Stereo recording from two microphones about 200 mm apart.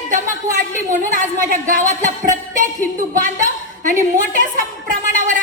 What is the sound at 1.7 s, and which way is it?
Music, 40° right (ahead or behind).